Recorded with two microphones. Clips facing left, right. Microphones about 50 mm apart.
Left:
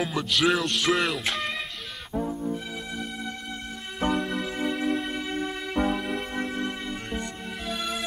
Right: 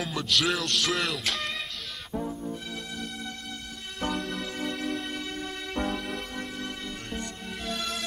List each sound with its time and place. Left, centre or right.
0.0 s music: centre
4.0 s music: centre
6.3 s music: left